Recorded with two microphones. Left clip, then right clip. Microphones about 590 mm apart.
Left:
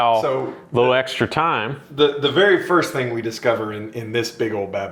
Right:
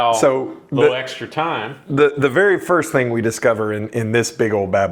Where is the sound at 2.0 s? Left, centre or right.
Right.